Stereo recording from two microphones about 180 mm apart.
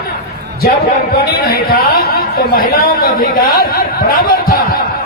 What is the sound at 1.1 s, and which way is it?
Speech, 60° left (ahead or behind).